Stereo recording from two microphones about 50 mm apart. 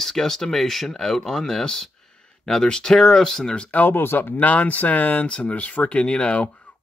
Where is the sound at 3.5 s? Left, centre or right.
Left.